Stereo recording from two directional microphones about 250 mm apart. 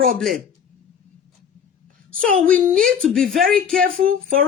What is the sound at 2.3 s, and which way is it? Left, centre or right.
Speech, right.